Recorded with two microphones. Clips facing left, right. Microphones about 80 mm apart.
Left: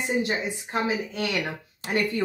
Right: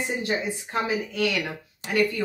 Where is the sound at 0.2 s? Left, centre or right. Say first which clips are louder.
Even; left.